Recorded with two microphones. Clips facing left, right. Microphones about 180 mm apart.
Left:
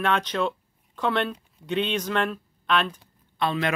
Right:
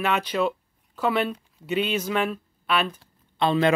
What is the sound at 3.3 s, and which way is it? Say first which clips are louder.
Speech: right 5 dB; 25° right (ahead or behind).